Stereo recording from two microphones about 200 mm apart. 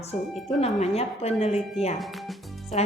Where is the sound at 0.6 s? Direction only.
30° left (ahead or behind).